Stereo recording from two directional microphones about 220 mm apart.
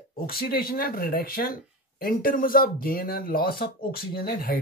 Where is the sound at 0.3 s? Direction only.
45° left (ahead or behind).